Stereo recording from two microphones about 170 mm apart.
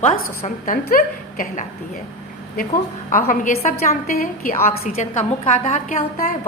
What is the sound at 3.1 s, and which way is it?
A woman's voice, 55° left (ahead or behind).